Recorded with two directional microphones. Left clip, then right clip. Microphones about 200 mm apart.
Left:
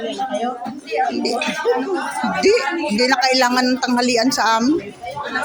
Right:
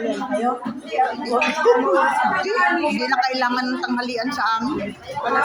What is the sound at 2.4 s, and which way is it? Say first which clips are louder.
A woman's voice: left 2 dB; 60° left (ahead or behind).